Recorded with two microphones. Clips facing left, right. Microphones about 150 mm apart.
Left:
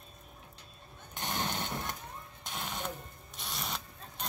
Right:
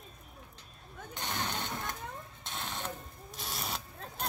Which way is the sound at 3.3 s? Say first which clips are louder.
Right 1 dB; 5° right (ahead or behind).